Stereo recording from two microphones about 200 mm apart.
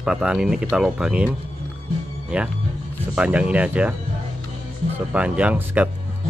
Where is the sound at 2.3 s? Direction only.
5° right (ahead or behind).